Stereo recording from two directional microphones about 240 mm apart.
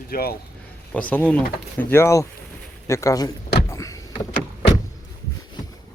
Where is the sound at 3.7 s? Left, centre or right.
Centre.